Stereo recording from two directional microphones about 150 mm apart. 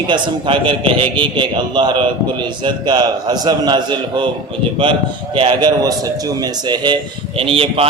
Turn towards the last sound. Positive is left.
turn(degrees=-40)  # may be behind; listen again after turning